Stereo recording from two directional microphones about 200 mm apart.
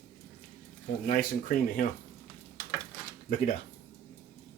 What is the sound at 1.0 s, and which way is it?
Speech, 45° left (ahead or behind).